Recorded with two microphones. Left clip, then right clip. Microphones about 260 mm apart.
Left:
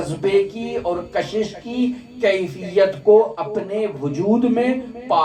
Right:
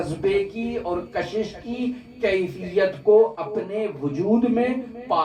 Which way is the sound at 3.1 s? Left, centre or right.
Left.